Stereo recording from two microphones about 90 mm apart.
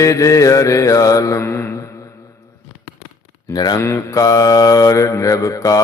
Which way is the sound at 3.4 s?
50° left (ahead or behind).